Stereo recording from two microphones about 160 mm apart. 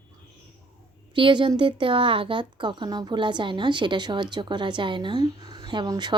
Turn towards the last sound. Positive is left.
turn(degrees=-25)  # may be behind; listen again after turning